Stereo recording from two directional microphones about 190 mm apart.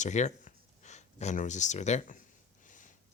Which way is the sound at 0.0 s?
35° left (ahead or behind).